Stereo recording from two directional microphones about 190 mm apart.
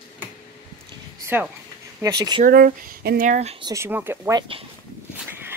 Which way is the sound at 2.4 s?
50° right (ahead or behind).